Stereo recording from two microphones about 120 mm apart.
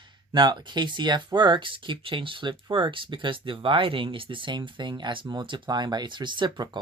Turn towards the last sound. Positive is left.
turn(degrees=-40)  # may be behind; listen again after turning